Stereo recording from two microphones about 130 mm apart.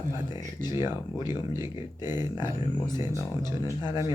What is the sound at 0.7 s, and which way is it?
Speech, 20° right (ahead or behind).